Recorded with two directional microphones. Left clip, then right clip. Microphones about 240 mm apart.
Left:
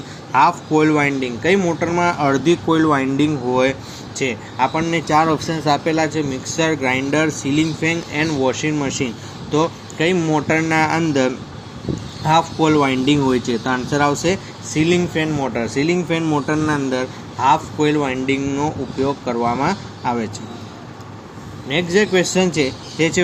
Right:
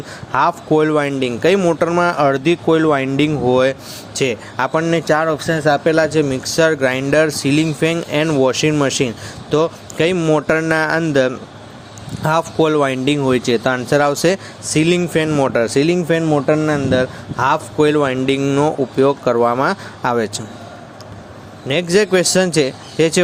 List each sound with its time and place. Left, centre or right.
0.3 s speech: right
21.7 s speech: right